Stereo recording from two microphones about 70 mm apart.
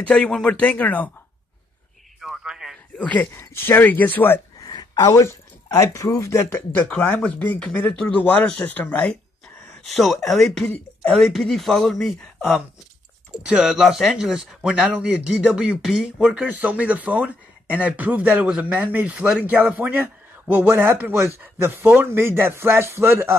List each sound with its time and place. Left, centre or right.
0.1 s speech: centre
2.2 s a sound: centre
3.0 s speech: left
3.3 s speech: left
5.1 s speech: left
6.5 s speech: left
9.8 s speech: centre
13.3 s speech: centre
16.3 s speech: right